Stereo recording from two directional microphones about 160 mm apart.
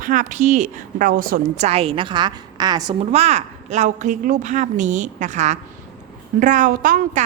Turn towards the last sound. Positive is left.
turn(degrees=-60)  # may be behind; listen again after turning